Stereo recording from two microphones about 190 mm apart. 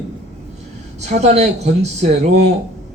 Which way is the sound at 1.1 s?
35° right (ahead or behind).